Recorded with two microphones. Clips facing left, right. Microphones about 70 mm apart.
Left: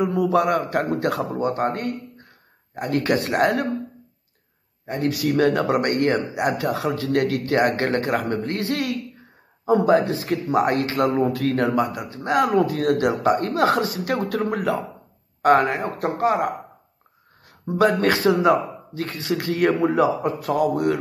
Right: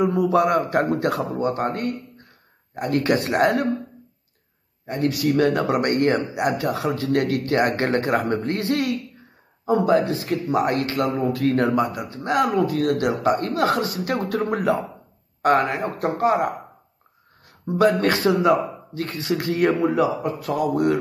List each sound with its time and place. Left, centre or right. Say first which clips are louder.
0.0 s a man's voice: right 1 dB; centre
4.8 s a man's voice: right 1 dB; centre
9.9 s a man's voice: left 1 dB; centre
10.9 s speech: left 2 dB; centre
11.3 s a man's voice: right 1 dB; centre
15.4 s a man's voice: left 2 dB; centre
17.7 s a man's voice: even; centre
19.8 s speech: left 1 dB; centre
20.4 s a man's voice: even; centre